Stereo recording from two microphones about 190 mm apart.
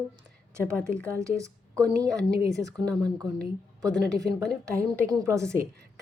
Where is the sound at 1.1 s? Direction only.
15° right (ahead or behind).